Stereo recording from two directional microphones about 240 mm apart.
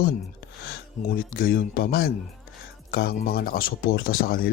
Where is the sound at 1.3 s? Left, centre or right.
Left.